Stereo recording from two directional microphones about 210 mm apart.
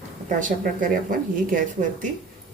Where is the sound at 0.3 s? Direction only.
40° right (ahead or behind).